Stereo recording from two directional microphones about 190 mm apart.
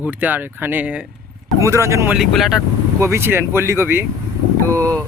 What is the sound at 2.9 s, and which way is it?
Speech, 15° right (ahead or behind).